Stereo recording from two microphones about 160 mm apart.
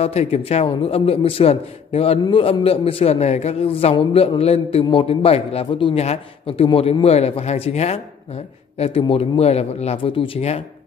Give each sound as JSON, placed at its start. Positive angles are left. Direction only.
{"t": 0.0, "sound": "a man's voice", "side_deg": 40}